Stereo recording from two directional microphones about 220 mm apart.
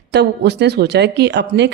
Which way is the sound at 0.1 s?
50° right (ahead or behind).